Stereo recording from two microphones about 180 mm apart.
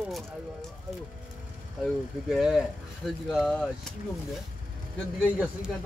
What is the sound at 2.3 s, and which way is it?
Speech, centre (ahead or behind).